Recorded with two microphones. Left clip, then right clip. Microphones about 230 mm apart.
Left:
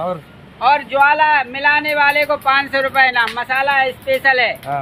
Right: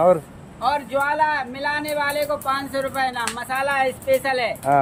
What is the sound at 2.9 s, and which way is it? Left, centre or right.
Speech, centre.